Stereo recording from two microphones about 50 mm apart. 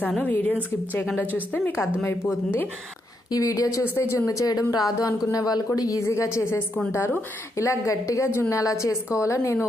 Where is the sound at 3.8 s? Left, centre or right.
Left.